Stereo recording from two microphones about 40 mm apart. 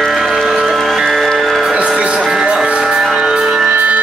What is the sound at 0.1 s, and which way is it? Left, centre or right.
Music, centre.